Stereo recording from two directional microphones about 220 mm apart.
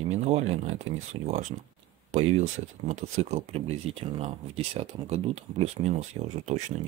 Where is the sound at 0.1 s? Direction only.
30° right (ahead or behind).